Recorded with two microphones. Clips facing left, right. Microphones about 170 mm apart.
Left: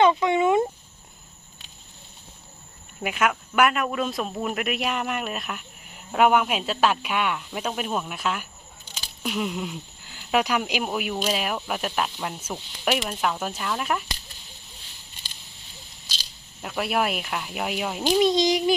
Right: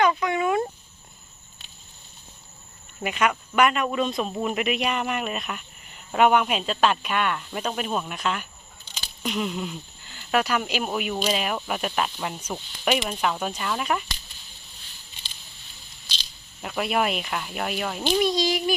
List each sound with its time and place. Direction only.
0.0 s a sound: 25° left (ahead or behind)
3.0 s speech: 5° left (ahead or behind)
16.0 s speech: 5° left (ahead or behind)